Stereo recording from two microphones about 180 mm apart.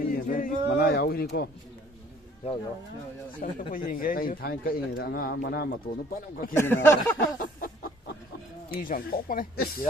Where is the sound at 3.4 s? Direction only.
50° left (ahead or behind).